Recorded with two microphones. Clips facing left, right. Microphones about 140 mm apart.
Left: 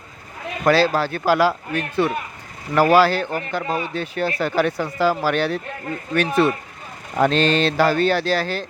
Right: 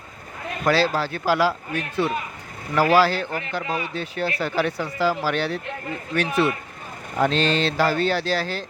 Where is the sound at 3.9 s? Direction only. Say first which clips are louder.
Left 3 dB; 55° left (ahead or behind).